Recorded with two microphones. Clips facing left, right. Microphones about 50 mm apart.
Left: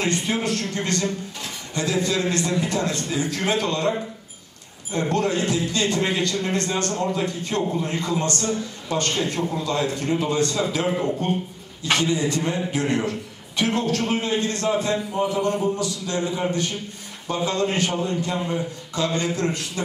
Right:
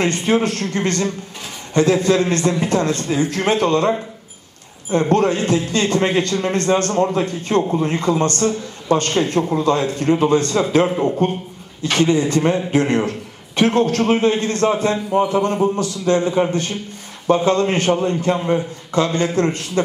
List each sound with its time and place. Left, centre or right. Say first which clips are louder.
0.0 s a man's voice: right 6 dB; right
4.9 s speech: right 6 dB; right